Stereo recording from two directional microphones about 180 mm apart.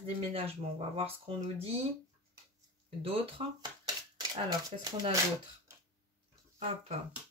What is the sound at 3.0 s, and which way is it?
Speech, 30° right (ahead or behind).